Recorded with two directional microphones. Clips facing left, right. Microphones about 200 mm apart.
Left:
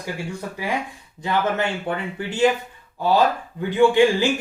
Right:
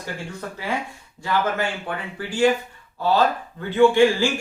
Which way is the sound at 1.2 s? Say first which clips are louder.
Left 1 dB; 20° left (ahead or behind).